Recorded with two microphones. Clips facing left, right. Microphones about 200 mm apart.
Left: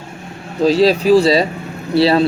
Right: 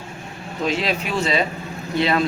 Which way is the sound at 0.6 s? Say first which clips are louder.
Left 11 dB; 35° left (ahead or behind).